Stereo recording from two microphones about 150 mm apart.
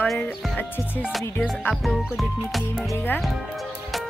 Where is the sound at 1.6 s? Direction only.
Centre (ahead or behind).